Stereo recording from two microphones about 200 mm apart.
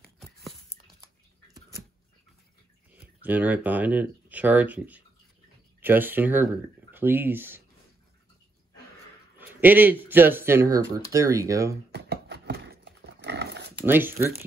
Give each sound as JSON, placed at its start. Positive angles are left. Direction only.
{"t": 0.2, "sound": "a sound", "side_deg": 0}
{"t": 3.0, "sound": "speech", "side_deg": -10}
{"t": 9.4, "sound": "speech", "side_deg": -10}
{"t": 11.9, "sound": "dog", "side_deg": -55}
{"t": 13.8, "sound": "speech", "side_deg": -10}